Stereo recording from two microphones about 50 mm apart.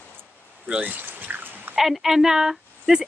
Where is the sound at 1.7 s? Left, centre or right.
Centre.